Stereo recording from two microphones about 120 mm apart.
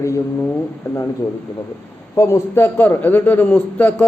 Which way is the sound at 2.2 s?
25° left (ahead or behind).